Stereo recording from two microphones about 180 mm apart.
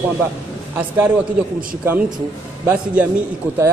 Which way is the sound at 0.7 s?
10° right (ahead or behind).